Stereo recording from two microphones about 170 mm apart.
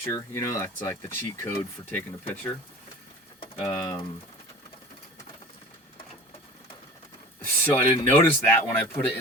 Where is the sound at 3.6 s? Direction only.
15° left (ahead or behind).